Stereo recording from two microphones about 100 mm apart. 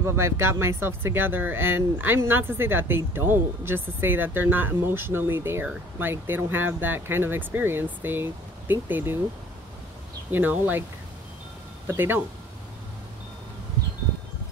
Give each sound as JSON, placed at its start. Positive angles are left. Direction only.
{"t": 0.0, "sound": "speech", "side_deg": -25}
{"t": 10.3, "sound": "speech", "side_deg": -20}
{"t": 11.9, "sound": "speech", "side_deg": -20}